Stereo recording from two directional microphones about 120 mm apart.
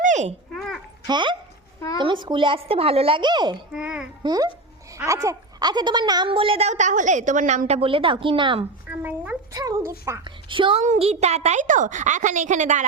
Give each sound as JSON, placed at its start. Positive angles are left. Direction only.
{"t": 0.0, "sound": "a sound", "side_deg": -85}
{"t": 0.5, "sound": "a sound", "side_deg": 0}
{"t": 1.0, "sound": "a child's voice", "side_deg": -40}
{"t": 3.7, "sound": "speech", "side_deg": -10}
{"t": 4.2, "sound": "a child's voice", "side_deg": -35}
{"t": 7.9, "sound": "a woman's voice", "side_deg": -45}
{"t": 8.9, "sound": "speech", "side_deg": -15}
{"t": 9.5, "sound": "speech", "side_deg": -30}
{"t": 10.2, "sound": "a woman's voice", "side_deg": -45}
{"t": 10.8, "sound": "a child's voice", "side_deg": -60}